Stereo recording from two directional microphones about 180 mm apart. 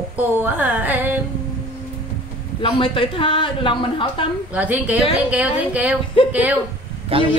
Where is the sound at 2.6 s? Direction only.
30° left (ahead or behind).